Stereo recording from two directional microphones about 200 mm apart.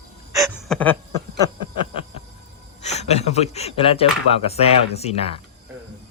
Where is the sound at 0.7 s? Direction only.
5° left (ahead or behind).